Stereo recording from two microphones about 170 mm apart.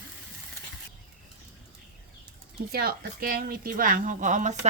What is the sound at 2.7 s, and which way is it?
A woman's voice, 65° right (ahead or behind).